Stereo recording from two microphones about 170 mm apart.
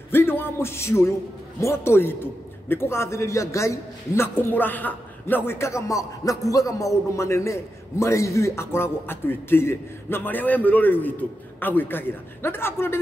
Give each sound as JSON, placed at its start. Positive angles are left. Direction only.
{"t": 0.1, "sound": "a man's voice", "side_deg": 10}